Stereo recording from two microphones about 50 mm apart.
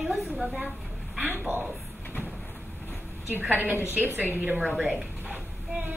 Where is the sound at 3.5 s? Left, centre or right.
Right.